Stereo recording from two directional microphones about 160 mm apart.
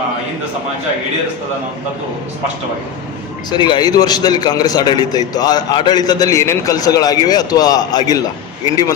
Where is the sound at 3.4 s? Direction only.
30° left (ahead or behind).